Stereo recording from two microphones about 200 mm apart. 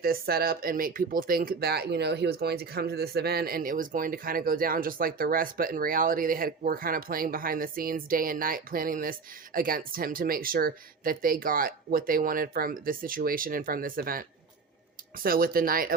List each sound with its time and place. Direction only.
0.0 s speech: 50° right (ahead or behind)